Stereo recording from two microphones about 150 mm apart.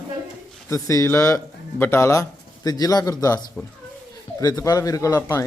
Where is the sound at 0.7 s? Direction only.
20° left (ahead or behind).